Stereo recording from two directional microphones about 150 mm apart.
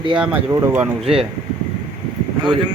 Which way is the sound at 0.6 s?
15° right (ahead or behind).